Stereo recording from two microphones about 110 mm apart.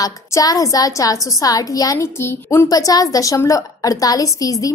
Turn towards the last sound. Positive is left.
turn(degrees=30)  # may be behind; listen again after turning